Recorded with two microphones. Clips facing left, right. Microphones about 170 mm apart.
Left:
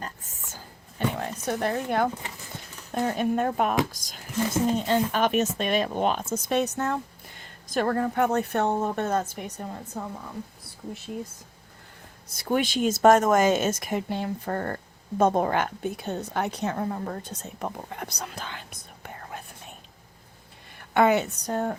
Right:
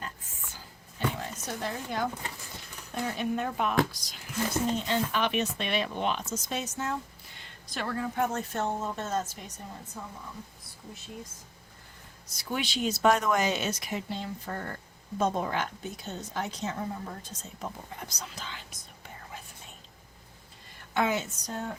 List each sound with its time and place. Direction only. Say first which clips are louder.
0.0 s oink: left 3 dB; 40° left (ahead or behind)
0.9 s a sound: left 4 dB; 55° left (ahead or behind)
2.9 s speech: left 6 dB; 50° left (ahead or behind)
3.9 s a sound: left 5 dB; 45° left (ahead or behind)
4.7 s speech: left 5 dB; 45° left (ahead or behind)
12.3 s a woman's voice: left 8 dB; 50° left (ahead or behind)
20.9 s speech: left 8 dB; 60° left (ahead or behind)